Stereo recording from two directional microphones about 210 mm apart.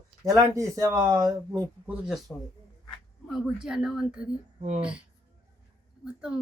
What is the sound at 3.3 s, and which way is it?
A woman's voice, centre (ahead or behind).